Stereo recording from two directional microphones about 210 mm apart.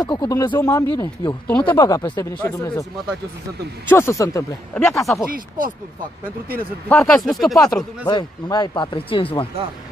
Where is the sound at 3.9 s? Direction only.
10° left (ahead or behind).